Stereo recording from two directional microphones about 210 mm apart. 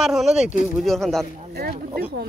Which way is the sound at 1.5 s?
45° right (ahead or behind).